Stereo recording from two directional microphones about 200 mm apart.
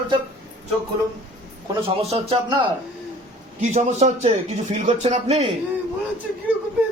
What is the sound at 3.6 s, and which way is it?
A man's voice, 35° right (ahead or behind).